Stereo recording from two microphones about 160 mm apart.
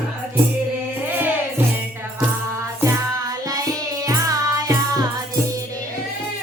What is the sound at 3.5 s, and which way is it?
Music, 20° right (ahead or behind).